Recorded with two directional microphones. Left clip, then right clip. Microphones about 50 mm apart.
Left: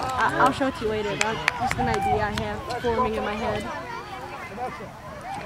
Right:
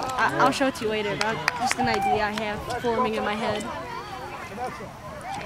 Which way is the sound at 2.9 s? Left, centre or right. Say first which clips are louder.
Even; right.